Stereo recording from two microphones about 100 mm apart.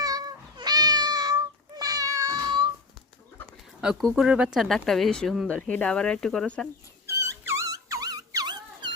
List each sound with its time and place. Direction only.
0.0 s cat: 40° right (ahead or behind)
3.8 s speech: 5° right (ahead or behind)
7.1 s dog: 30° right (ahead or behind)